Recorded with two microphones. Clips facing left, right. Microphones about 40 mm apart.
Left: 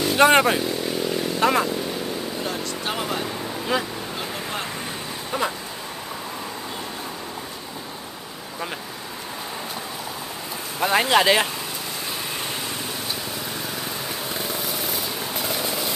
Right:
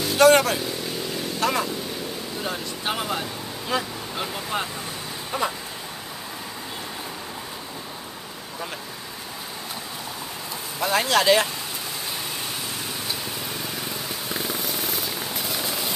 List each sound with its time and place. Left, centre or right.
0.0 s speech: left
1.1 s vehicle: centre
2.4 s speech: centre
3.7 s speech: centre
4.2 s waves: centre
5.3 s speech: centre
10.8 s speech: centre
14.3 s vehicle: centre